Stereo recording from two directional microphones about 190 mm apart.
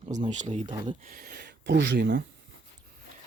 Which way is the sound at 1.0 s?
50° right (ahead or behind).